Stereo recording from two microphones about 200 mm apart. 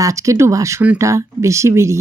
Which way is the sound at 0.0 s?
15° right (ahead or behind).